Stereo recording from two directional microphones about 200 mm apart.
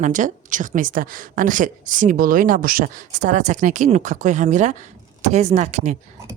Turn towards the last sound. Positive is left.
turn(degrees=-35)  # may be behind; listen again after turning